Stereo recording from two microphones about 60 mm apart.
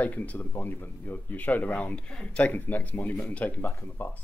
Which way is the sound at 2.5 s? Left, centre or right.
Left.